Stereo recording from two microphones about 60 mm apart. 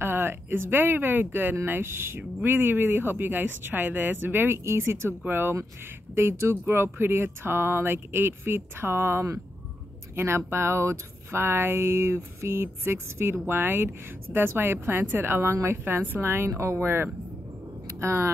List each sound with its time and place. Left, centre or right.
0.0 s speech: right